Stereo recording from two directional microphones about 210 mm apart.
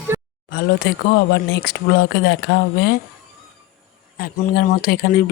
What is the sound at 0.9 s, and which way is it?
Speech, 50° left (ahead or behind).